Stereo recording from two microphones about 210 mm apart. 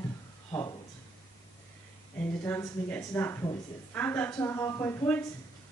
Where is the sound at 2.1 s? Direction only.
10° left (ahead or behind).